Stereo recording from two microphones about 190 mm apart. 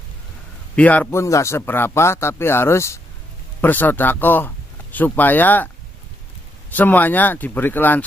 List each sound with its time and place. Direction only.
0.7 s speech: 10° left (ahead or behind)
6.7 s speech: 10° left (ahead or behind)